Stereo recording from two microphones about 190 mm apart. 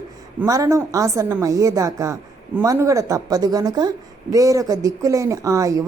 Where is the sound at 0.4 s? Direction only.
15° right (ahead or behind).